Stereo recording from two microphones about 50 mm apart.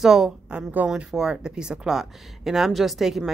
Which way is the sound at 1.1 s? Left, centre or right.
Centre.